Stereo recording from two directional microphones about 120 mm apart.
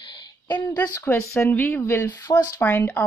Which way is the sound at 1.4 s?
15° left (ahead or behind).